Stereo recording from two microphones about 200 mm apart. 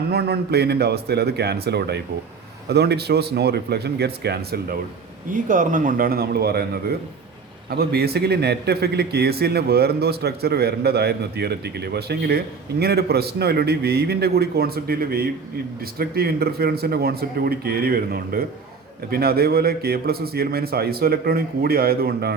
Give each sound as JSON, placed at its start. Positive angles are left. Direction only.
{"t": 0.1, "sound": "a man's voice", "side_deg": -55}
{"t": 5.3, "sound": "a man's voice", "side_deg": -40}